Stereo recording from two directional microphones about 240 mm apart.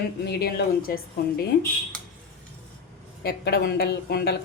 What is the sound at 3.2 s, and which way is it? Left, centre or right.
Cutlery, left.